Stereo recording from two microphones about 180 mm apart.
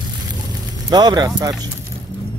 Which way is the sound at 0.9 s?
20° right (ahead or behind).